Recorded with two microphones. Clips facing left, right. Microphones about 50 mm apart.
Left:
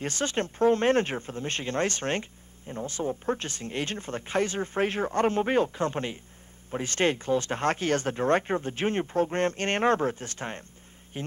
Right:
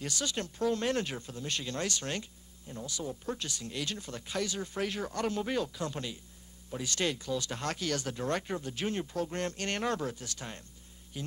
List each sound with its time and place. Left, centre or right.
0.0 s speech: left